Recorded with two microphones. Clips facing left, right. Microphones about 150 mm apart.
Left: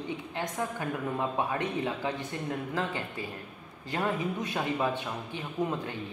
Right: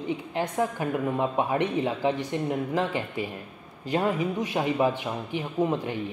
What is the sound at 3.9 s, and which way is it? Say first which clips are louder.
Speech: right 5 dB; 20° right (ahead or behind).